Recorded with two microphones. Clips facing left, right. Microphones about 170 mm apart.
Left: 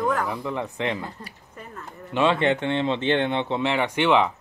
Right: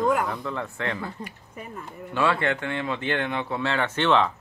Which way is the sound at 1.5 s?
10° right (ahead or behind).